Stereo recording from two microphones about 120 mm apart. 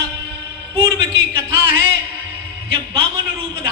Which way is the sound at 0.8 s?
40° right (ahead or behind).